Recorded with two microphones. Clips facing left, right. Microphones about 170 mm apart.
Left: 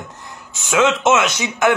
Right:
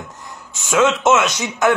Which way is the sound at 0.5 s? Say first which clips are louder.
Even; 20° left (ahead or behind).